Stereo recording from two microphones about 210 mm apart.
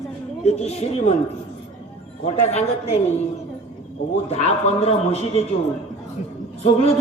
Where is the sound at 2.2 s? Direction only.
30° left (ahead or behind).